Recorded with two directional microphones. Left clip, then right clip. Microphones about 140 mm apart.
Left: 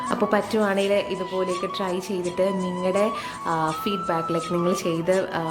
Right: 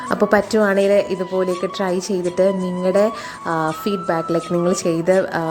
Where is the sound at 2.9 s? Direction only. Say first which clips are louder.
Right 6 dB; 30° right (ahead or behind).